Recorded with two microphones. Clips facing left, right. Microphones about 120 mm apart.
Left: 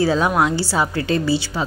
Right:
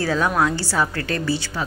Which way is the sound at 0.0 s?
15° left (ahead or behind).